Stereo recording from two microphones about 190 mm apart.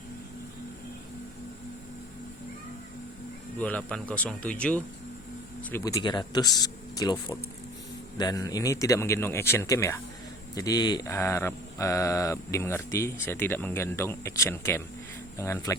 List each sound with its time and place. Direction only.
3.6 s mantra: 5° left (ahead or behind)
5.7 s speech: 20° left (ahead or behind)
8.2 s mantra: 20° left (ahead or behind)